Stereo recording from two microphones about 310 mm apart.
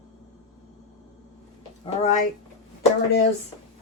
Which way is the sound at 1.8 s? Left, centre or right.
Left.